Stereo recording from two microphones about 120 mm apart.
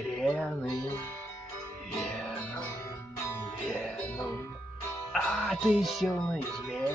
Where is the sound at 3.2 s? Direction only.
20° left (ahead or behind).